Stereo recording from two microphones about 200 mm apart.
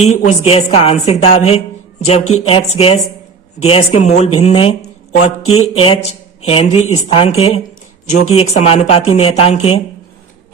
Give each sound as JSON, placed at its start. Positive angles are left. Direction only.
{"t": 0.0, "sound": "a woman's voice", "side_deg": 35}